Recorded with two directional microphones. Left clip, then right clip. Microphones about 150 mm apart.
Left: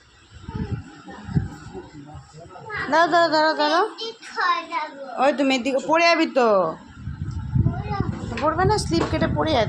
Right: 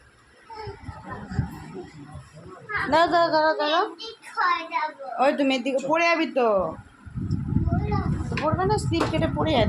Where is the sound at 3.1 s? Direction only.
20° left (ahead or behind).